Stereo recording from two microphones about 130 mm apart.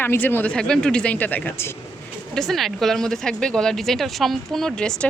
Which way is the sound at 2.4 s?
Centre (ahead or behind).